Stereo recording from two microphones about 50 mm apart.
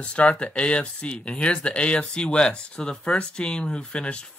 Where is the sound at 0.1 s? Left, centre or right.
Left.